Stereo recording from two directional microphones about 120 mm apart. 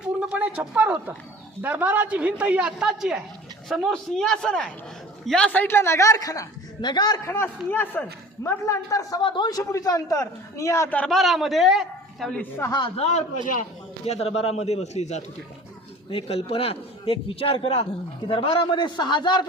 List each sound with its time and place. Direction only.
0.0 s a sound: 10° right (ahead or behind)
0.8 s a woman's voice: 15° right (ahead or behind); by 7.3 s 35° left (ahead or behind)
7.3 s a man's voice: 15° left (ahead or behind)
9.2 s a man's voice: 40° left (ahead or behind); by 10.9 s 25° left (ahead or behind)
11.1 s a man's voice: centre (ahead or behind)
12.4 s a man's voice: 20° left (ahead or behind)
13.0 s a man's voice: 70° left (ahead or behind)
16.0 s a man's voice: 55° left (ahead or behind); by 19.5 s 40° left (ahead or behind)